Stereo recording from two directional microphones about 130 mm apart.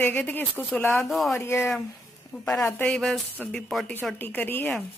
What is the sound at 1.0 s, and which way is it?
Speech, centre (ahead or behind).